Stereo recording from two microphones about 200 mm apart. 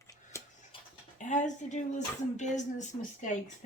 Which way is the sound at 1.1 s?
40° left (ahead or behind).